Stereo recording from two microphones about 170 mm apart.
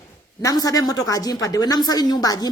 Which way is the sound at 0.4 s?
20° left (ahead or behind).